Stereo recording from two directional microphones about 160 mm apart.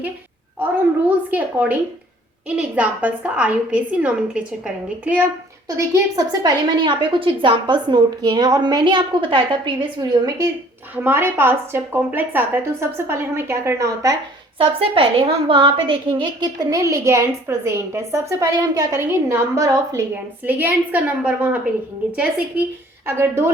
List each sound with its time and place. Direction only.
0.6 s a woman's voice: 10° right (ahead or behind)
5.6 s a woman's voice: 20° right (ahead or behind)
14.6 s a woman's voice: 35° right (ahead or behind); by 23.5 s 15° right (ahead or behind)